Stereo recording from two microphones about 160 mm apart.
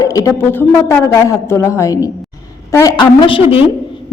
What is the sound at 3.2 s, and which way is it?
Speech, 35° left (ahead or behind).